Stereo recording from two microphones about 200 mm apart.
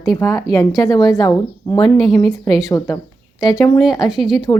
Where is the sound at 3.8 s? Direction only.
Centre (ahead or behind).